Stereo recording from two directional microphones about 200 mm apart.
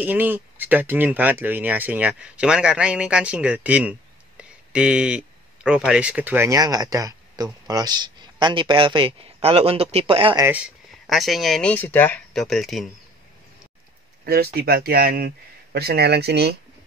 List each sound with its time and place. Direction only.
0.0 s speech: 10° right (ahead or behind); by 10.4 s 25° right (ahead or behind)
10.4 s speech: 5° right (ahead or behind)
14.2 s speech: 50° right (ahead or behind)